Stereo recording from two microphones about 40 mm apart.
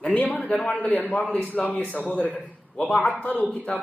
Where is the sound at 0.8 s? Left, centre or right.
Left.